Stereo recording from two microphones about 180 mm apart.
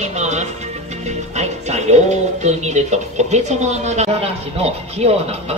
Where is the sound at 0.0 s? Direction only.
40° right (ahead or behind).